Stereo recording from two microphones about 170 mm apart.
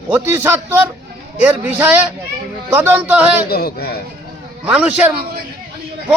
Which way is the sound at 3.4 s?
65° left (ahead or behind).